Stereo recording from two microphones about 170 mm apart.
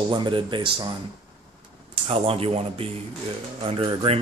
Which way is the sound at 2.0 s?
35° right (ahead or behind).